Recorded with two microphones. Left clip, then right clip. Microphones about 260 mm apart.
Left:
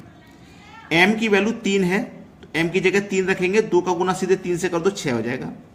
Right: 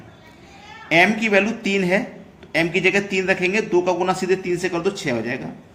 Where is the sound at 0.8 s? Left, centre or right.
Centre.